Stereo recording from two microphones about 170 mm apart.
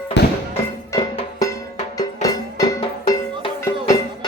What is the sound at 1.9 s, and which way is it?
Music, 20° left (ahead or behind).